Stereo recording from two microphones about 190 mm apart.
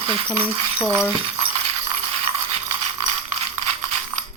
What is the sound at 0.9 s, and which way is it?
Speech, 30° right (ahead or behind).